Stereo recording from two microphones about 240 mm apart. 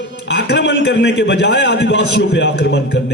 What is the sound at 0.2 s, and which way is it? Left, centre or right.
A man's voice, left.